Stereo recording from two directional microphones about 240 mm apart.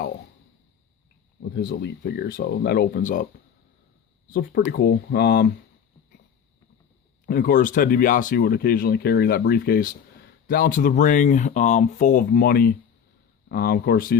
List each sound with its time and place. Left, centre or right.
1.4 s speech: left
4.3 s speech: left
7.3 s speech: left